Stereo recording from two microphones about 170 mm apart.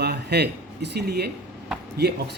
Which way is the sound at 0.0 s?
75° right (ahead or behind).